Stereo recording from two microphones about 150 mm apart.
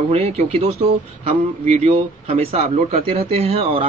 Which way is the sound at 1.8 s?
45° right (ahead or behind).